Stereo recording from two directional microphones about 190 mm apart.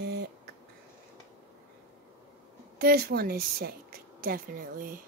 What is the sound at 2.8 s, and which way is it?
A woman's voice, 55° right (ahead or behind).